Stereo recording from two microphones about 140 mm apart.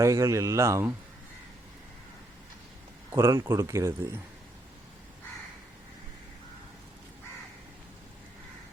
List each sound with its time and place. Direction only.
0.0 s speech: 20° right (ahead or behind)
3.1 s speech: 20° right (ahead or behind)